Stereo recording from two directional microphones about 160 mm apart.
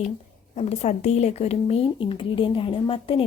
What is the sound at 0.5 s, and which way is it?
Speech, 40° left (ahead or behind).